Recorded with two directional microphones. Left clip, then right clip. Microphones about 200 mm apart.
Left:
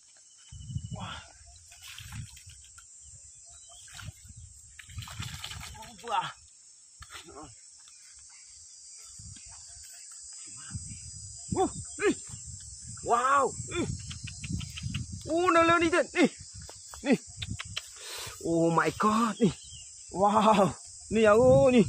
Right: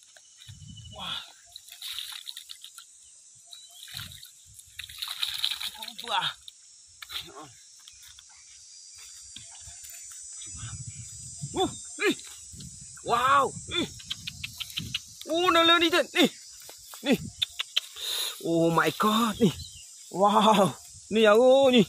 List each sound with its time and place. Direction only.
0.9 s cricket: centre (ahead or behind)
1.7 s splash: 5° left (ahead or behind)
5.0 s splash: 5° left (ahead or behind)
7.0 s cricket: 5° right (ahead or behind)
11.5 s a sound: centre (ahead or behind)
13.0 s cricket: 5° left (ahead or behind)
15.2 s snake: 5° right (ahead or behind); by 19.6 s 35° right (ahead or behind)
20.1 s speech: 45° right (ahead or behind); by 21.8 s 15° right (ahead or behind)